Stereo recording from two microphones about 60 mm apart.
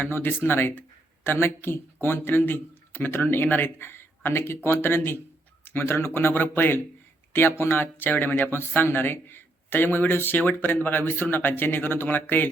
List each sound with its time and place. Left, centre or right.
0.0 s speech: left